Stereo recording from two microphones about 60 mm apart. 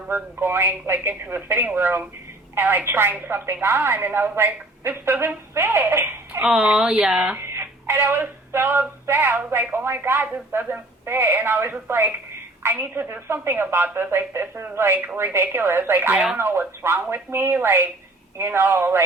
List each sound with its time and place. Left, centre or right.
0.1 s speech: right
6.5 s speech: centre
6.9 s speech: right
7.3 s a sound: right
9.0 s speech: right
16.1 s speech: centre
16.4 s speech: right